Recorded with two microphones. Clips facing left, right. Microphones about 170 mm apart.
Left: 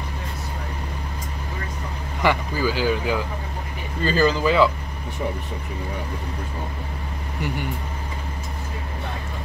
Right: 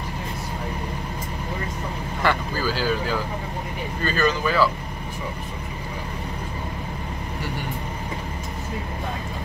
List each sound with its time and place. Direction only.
2.2 s speech: 15° left (ahead or behind)
4.0 s speech: 30° left (ahead or behind)